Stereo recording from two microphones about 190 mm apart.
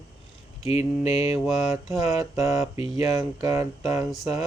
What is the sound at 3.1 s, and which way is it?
Speech, 20° right (ahead or behind).